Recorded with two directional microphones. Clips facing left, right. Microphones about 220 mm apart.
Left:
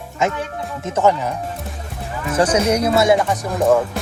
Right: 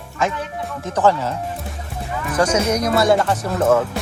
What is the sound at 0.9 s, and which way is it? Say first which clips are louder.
Speech: even; 15° left (ahead or behind).